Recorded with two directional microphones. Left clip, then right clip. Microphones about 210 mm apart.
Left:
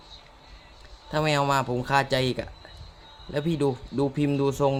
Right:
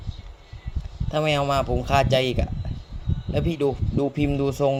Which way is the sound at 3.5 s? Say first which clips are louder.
Right 2 dB; centre (ahead or behind).